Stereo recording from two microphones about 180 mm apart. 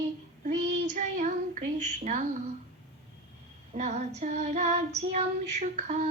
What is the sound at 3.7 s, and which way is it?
Female singing, 40° right (ahead or behind).